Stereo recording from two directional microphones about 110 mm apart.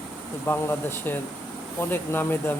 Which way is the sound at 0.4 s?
20° left (ahead or behind).